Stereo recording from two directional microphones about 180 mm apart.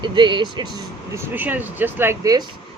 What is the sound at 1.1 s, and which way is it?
Speech, 10° right (ahead or behind).